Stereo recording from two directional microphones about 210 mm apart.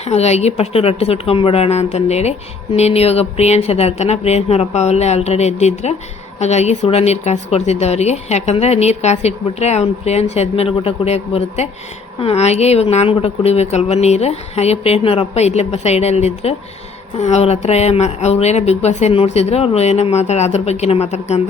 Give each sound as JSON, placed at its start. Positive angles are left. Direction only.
{"t": 0.1, "sound": "speech", "side_deg": 30}